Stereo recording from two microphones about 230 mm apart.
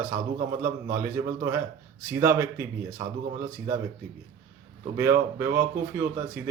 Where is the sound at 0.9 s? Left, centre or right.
Centre.